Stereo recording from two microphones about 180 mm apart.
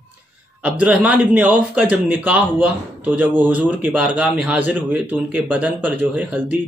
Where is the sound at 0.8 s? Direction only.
10° right (ahead or behind).